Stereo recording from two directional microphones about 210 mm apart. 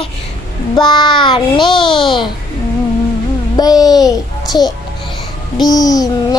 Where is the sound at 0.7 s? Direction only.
20° left (ahead or behind).